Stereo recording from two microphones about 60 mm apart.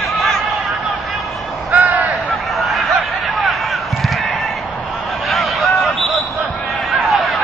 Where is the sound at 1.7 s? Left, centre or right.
Right.